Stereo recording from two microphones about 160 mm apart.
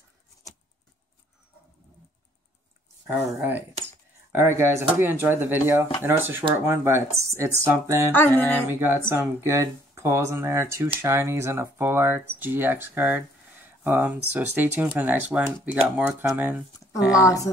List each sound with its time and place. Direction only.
3.1 s speech: 15° right (ahead or behind)
8.1 s music: 10° left (ahead or behind)
8.6 s speech: 15° right (ahead or behind)
17.1 s speech: 20° left (ahead or behind)